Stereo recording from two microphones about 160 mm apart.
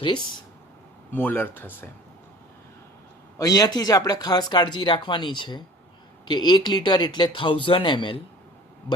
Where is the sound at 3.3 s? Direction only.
25° left (ahead or behind).